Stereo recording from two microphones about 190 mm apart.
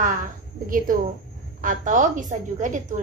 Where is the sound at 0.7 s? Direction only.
45° right (ahead or behind).